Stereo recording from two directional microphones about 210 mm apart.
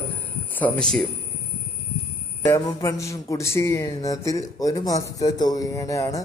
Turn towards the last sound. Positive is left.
turn(degrees=15)  # may be behind; listen again after turning